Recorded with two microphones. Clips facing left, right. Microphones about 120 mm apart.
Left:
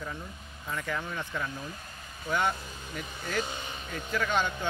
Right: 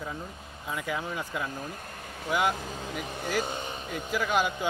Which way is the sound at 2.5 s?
90° right.